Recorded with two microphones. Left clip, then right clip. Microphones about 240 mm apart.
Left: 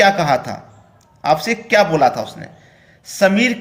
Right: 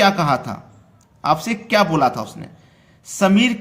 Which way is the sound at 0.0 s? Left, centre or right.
Right.